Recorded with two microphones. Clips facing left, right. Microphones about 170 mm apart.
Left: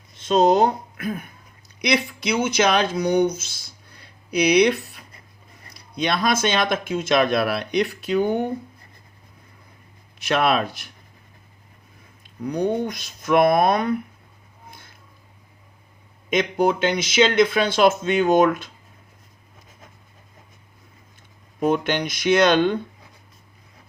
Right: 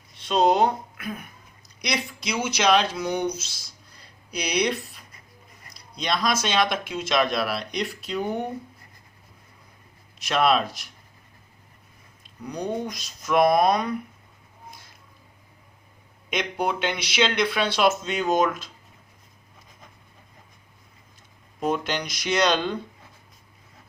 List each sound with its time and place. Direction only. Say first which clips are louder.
0.2 s speech: left 3 dB; 45° left (ahead or behind)
1.6 s speech: left 7 dB; 60° left (ahead or behind)
10.2 s speech: left 1 dB; 60° left (ahead or behind)
12.5 s speech: left 6 dB; 60° left (ahead or behind)
14.7 s a sound: left 1 dB; 60° left (ahead or behind)
16.3 s speech: left 7 dB; 45° left (ahead or behind)
21.6 s speech: left 5 dB; 55° left (ahead or behind)